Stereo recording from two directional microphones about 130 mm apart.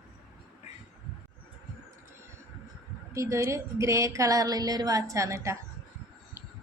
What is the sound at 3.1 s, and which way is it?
Speech, 20° right (ahead or behind).